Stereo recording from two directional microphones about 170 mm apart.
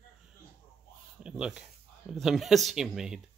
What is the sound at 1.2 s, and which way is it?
Speech, 5° right (ahead or behind).